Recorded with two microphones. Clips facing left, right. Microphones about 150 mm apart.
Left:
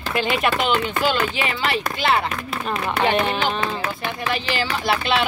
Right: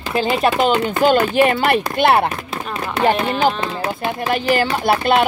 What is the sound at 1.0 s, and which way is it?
Speech, 50° right (ahead or behind).